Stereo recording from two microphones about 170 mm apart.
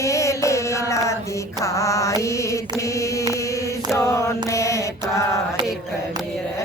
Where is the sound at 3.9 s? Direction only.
15° left (ahead or behind).